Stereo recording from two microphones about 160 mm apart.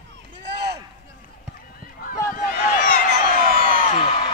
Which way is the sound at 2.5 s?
65° left (ahead or behind).